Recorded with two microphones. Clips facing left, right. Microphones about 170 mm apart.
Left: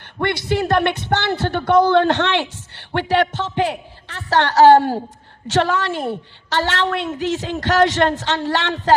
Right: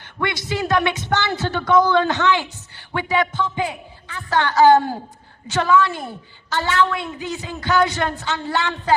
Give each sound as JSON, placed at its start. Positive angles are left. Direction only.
{"t": 0.2, "sound": "a woman's voice", "side_deg": 60}